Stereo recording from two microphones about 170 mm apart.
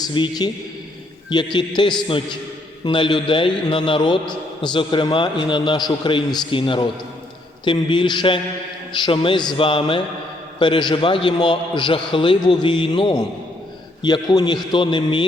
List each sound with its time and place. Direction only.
0.1 s a man's voice: 25° left (ahead or behind)
1.5 s a man's voice: 25° left (ahead or behind)